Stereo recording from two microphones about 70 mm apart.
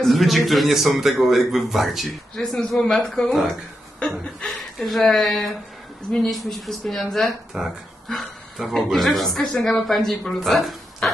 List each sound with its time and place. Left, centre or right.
0.0 s a man's voice: centre
4.5 s a man's voice: centre